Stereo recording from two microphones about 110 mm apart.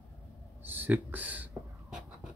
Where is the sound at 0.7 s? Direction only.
15° right (ahead or behind).